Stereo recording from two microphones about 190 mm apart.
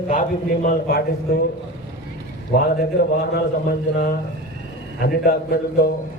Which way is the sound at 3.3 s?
55° left (ahead or behind).